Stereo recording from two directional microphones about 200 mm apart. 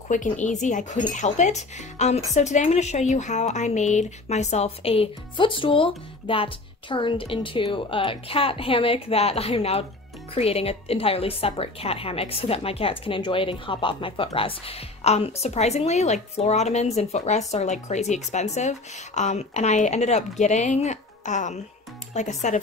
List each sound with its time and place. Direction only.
0.1 s a woman's voice: 40° left (ahead or behind)